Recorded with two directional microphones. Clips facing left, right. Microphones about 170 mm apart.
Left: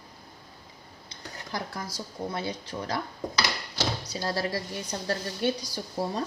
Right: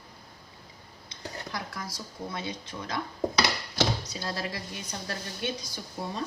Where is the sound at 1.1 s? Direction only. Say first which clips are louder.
Left 1 dB; 30° left (ahead or behind).